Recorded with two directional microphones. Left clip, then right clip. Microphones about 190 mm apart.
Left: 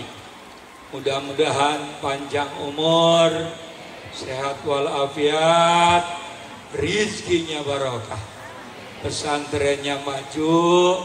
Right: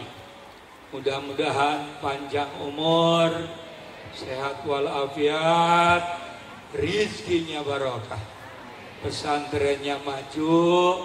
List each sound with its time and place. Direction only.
1.0 s a man's voice: 15° right (ahead or behind)
4.4 s a man's voice: 15° right (ahead or behind)
9.1 s a man's voice: 15° right (ahead or behind)